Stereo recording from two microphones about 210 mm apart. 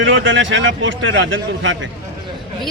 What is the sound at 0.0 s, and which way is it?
A man's voice, 65° right (ahead or behind).